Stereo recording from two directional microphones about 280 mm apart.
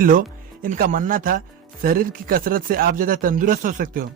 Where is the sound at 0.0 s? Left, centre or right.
Right.